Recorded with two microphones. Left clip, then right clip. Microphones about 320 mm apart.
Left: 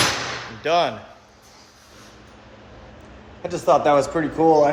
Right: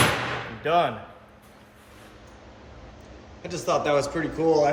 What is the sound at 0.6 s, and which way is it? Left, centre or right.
Speech, left.